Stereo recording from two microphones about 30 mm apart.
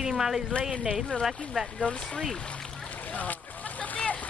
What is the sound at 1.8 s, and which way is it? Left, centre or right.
Speech, left.